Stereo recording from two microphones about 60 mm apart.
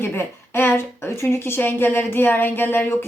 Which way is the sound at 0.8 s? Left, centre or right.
Left.